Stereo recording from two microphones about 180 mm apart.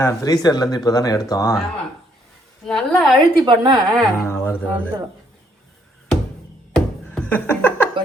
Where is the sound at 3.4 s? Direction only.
25° right (ahead or behind).